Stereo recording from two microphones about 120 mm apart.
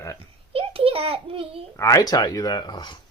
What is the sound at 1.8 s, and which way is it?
Speech, 30° left (ahead or behind).